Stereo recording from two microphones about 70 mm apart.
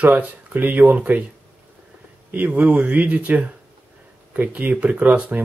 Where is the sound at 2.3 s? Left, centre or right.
Right.